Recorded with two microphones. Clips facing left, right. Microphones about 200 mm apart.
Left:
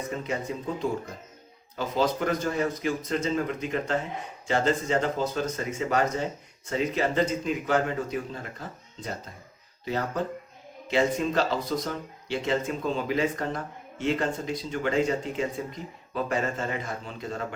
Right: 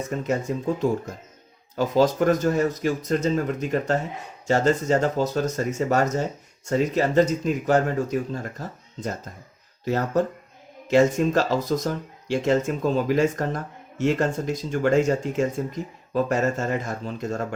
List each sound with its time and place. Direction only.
0.3 s speech: 45° right (ahead or behind)